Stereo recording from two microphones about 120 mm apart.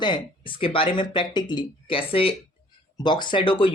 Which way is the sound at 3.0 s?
40° left (ahead or behind).